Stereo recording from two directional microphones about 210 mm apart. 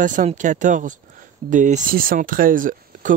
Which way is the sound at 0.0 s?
35° right (ahead or behind).